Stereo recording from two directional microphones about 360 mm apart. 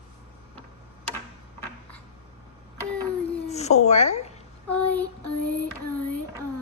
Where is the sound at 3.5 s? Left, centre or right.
Centre.